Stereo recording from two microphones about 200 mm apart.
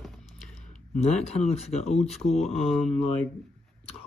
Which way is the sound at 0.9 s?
35° left (ahead or behind).